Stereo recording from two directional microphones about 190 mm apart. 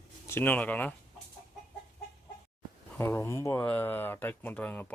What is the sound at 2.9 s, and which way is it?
Speech, 10° left (ahead or behind).